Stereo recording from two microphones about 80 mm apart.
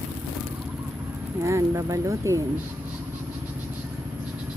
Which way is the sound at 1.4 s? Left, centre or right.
Right.